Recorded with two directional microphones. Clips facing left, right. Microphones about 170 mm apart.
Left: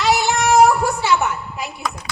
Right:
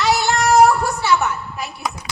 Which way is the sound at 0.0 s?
15° left (ahead or behind).